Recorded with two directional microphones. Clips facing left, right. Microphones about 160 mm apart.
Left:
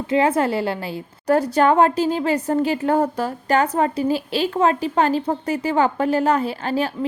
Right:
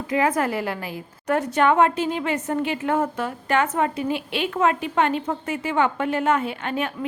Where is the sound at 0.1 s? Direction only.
30° left (ahead or behind).